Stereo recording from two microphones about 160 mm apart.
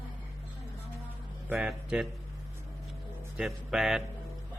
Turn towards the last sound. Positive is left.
turn(degrees=-5)  # may be behind; listen again after turning